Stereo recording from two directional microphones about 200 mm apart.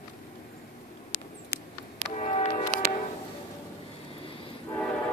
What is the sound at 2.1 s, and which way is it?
Music, 35° left (ahead or behind).